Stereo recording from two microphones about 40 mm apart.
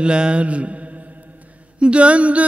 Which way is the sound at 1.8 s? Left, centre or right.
Right.